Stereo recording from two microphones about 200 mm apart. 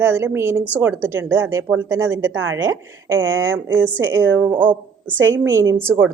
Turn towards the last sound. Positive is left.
turn(degrees=-10)  # may be behind; listen again after turning